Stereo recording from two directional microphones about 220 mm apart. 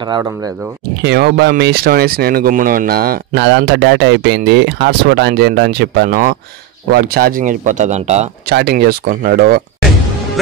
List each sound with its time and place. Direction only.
0.0 s speech: 15° right (ahead or behind)
1.0 s speech: 45° right (ahead or behind); by 8.3 s 30° right (ahead or behind)
8.5 s speech: 45° right (ahead or behind)